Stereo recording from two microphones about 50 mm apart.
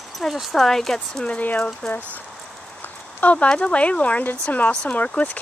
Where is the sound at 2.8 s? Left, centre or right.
Left.